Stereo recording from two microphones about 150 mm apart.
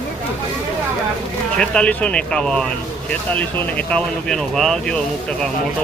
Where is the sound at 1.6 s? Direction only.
5° left (ahead or behind).